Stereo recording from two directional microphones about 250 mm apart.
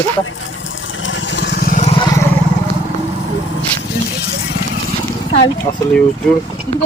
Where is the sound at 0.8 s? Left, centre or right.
Left.